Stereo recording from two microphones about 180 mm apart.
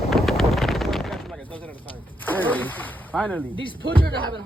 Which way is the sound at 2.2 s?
10° left (ahead or behind).